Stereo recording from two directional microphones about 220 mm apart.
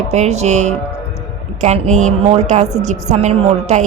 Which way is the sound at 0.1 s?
30° right (ahead or behind).